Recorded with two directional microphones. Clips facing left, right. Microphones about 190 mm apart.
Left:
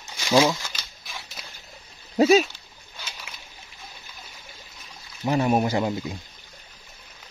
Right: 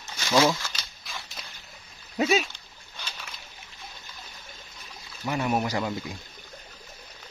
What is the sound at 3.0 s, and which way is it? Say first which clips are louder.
Bird: even; 10° left (ahead or behind).